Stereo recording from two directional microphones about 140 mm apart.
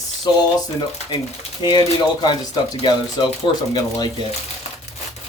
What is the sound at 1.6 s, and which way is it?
Speech, 30° left (ahead or behind).